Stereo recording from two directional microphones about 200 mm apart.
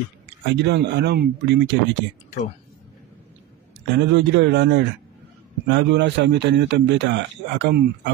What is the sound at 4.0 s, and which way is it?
A man's voice, 60° right (ahead or behind).